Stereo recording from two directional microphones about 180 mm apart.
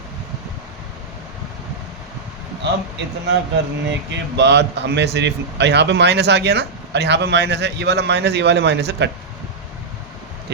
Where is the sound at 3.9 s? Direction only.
75° right (ahead or behind).